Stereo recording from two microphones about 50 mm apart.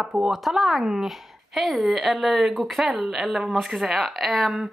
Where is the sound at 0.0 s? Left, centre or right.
Centre.